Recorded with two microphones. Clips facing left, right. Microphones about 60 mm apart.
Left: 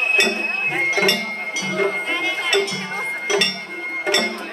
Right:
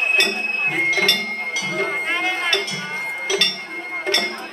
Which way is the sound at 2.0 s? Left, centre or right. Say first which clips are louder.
Right 1 dB; right.